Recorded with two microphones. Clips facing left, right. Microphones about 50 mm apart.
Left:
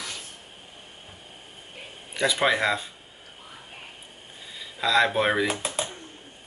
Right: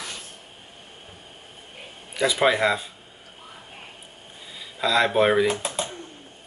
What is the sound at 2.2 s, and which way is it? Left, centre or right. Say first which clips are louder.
Speech: right 2 dB; centre.